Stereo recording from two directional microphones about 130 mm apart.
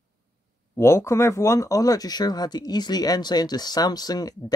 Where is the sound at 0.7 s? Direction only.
20° left (ahead or behind).